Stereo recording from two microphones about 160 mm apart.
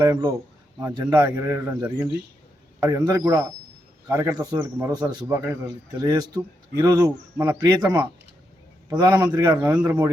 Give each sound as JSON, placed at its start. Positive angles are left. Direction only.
{"t": 0.0, "sound": "speech", "side_deg": -20}
{"t": 8.9, "sound": "speech", "side_deg": -25}